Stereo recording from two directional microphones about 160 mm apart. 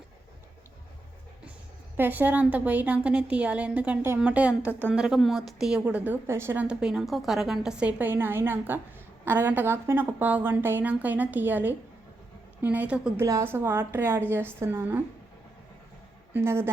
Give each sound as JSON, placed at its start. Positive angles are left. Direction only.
{"t": 2.0, "sound": "a woman's voice", "side_deg": -10}
{"t": 16.3, "sound": "a woman's voice", "side_deg": -15}